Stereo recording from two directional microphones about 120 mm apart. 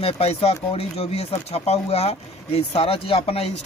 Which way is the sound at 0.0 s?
60° left (ahead or behind).